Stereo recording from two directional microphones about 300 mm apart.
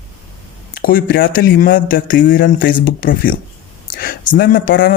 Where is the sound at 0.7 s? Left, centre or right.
Left.